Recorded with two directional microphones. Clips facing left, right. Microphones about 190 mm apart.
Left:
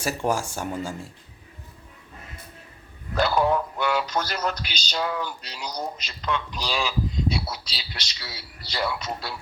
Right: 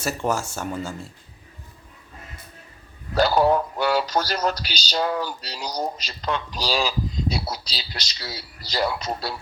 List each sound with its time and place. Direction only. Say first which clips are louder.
0.0 s speech: even; 10° left (ahead or behind)
3.2 s speech: right 3 dB; 35° right (ahead or behind)